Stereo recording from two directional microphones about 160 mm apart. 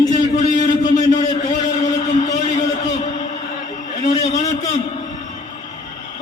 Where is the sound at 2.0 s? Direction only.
50° left (ahead or behind).